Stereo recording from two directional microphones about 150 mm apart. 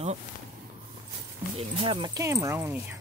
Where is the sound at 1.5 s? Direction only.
40° right (ahead or behind).